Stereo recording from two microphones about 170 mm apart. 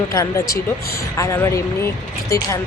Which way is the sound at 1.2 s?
15° left (ahead or behind).